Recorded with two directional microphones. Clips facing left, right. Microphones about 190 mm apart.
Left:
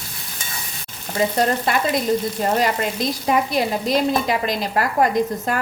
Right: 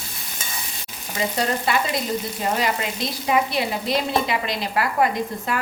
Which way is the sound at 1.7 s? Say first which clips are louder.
Left 4 dB; 45° left (ahead or behind).